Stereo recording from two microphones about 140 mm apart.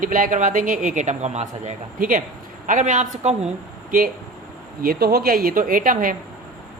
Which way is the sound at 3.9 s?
80° right.